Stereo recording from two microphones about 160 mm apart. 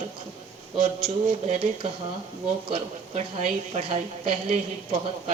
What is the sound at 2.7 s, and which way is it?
A woman's voice, 45° right (ahead or behind).